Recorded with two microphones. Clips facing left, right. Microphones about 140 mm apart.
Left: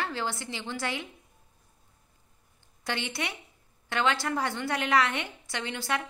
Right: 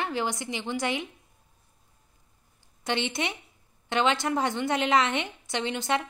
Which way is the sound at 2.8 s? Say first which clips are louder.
Right 4 dB; 20° right (ahead or behind).